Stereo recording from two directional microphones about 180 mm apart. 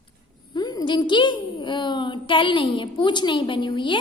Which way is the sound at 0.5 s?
20° left (ahead or behind).